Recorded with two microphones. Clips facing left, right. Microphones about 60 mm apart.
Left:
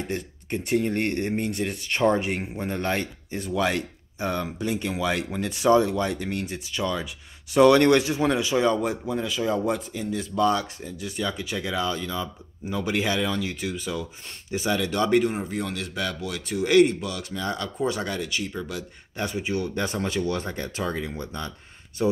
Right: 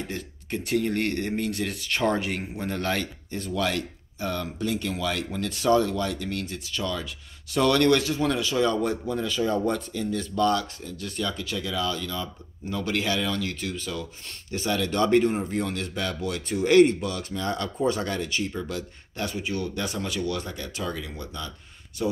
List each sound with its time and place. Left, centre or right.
0.1 s a man's voice: left
8.7 s speech: centre
19.1 s speech: left